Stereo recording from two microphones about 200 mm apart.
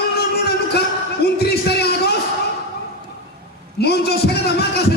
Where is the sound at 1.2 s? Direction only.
55° left (ahead or behind).